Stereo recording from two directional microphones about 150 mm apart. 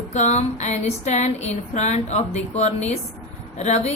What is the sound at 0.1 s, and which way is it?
Speech, 50° left (ahead or behind).